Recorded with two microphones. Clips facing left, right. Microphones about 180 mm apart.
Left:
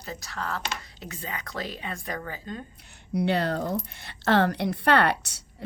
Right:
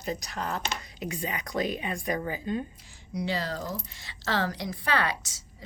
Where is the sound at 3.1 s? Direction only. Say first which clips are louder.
Left 6 dB; 65° left (ahead or behind).